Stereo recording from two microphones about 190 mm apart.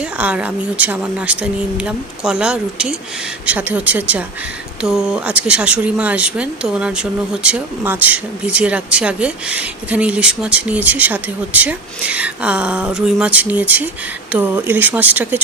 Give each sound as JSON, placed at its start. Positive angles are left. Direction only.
{"t": 0.2, "sound": "speech", "side_deg": -5}